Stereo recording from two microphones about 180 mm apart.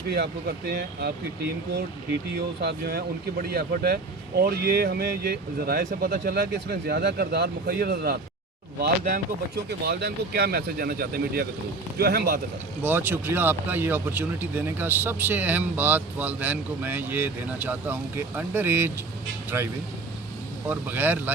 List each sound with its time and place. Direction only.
0.1 s speech: 65° right (ahead or behind)
2.3 s speech: 70° right (ahead or behind)
9.6 s speech: 65° right (ahead or behind)
12.8 s speech: 10° right (ahead or behind)